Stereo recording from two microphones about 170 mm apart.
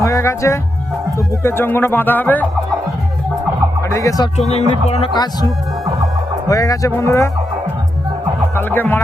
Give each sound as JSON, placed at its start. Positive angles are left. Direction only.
{"t": 0.0, "sound": "speech", "side_deg": 15}
{"t": 3.8, "sound": "speech", "side_deg": 20}
{"t": 4.4, "sound": "music", "side_deg": 40}
{"t": 6.5, "sound": "speech", "side_deg": 20}
{"t": 8.5, "sound": "speech", "side_deg": 10}